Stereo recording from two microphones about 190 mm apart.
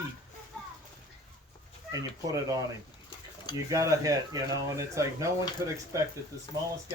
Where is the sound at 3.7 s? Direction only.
15° right (ahead or behind).